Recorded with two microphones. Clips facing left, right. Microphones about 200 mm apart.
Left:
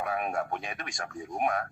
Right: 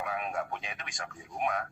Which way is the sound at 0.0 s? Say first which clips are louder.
Left 3 dB; 45° left (ahead or behind).